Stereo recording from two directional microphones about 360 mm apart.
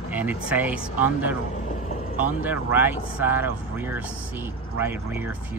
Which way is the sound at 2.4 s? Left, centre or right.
Centre.